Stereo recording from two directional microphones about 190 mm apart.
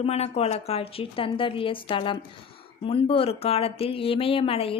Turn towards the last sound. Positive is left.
turn(degrees=30)  # may be behind; listen again after turning